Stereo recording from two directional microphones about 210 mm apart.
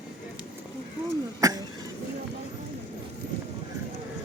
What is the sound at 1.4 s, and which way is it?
Cough, 15° right (ahead or behind).